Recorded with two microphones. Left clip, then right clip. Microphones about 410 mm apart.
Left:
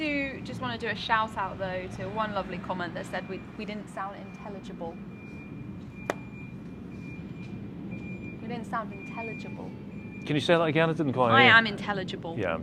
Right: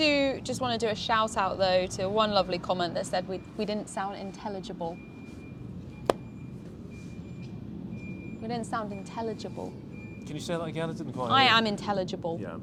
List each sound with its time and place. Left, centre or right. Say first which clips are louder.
0.0 s a woman's voice: right 6 dB; right
8.4 s speech: right 1 dB; right
10.2 s speech: left 10 dB; left
11.3 s speech: left 3 dB; right